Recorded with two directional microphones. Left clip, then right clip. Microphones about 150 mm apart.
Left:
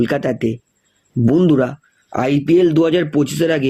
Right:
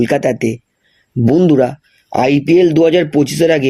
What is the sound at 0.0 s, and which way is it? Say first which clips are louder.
Speech: right 4 dB; 20° right (ahead or behind).